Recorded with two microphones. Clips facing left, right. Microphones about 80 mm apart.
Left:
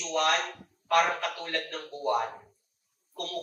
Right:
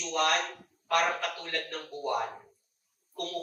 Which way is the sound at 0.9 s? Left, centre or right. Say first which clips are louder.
Left 3 dB; left.